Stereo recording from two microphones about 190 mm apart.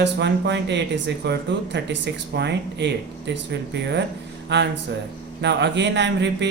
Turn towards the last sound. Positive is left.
turn(degrees=-65)  # may be behind; listen again after turning